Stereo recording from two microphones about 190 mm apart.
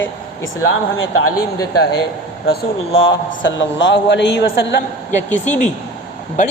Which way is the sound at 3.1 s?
75° left (ahead or behind).